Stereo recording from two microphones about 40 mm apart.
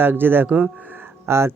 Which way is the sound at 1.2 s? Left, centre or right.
Right.